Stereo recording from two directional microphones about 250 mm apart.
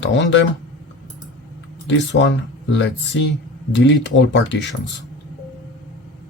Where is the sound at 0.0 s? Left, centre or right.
Left.